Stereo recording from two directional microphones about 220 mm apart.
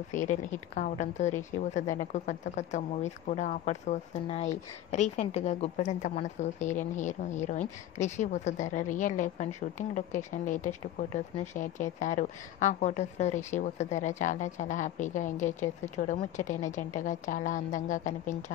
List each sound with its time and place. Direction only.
0.1 s a woman's voice: 35° left (ahead or behind)